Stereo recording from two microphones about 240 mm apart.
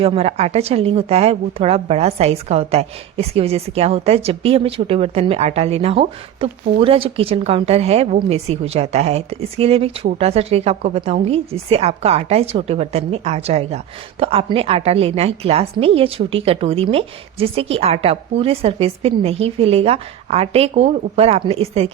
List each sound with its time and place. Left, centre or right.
0.0 s a woman's voice: right